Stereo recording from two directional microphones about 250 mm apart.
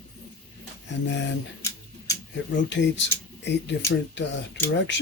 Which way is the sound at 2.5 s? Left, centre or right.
Left.